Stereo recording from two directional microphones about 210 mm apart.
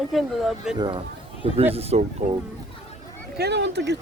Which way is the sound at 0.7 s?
20° right (ahead or behind).